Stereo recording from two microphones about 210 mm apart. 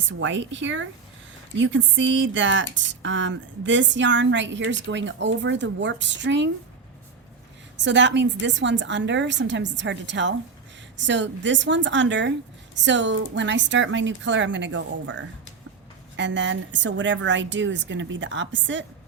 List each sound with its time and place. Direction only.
0.1 s speech: 60° right (ahead or behind)
7.8 s speech: 60° right (ahead or behind)